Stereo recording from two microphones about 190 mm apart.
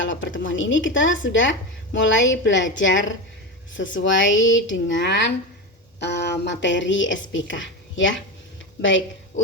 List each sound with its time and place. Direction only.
0.0 s a woman's voice: 80° left